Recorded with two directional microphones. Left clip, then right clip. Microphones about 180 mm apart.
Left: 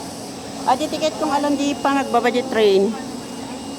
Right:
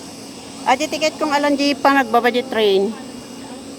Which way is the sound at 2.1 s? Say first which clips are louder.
Right 1 dB; 15° right (ahead or behind).